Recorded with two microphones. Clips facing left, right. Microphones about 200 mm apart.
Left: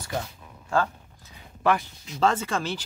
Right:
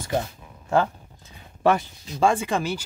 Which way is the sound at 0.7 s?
25° right (ahead or behind).